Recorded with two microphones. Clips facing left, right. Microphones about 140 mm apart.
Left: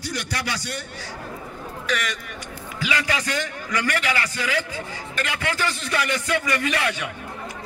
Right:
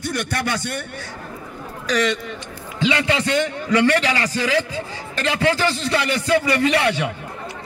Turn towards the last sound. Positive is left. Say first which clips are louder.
# right 6 dB
turn(degrees=-30)  # may be behind; listen again after turning